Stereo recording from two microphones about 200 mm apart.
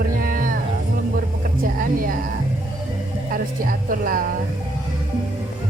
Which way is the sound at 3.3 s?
45° right (ahead or behind).